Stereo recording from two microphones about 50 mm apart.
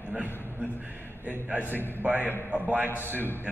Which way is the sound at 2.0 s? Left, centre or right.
Right.